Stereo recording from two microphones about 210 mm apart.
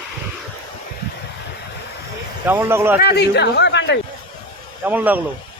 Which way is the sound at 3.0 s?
50° left (ahead or behind).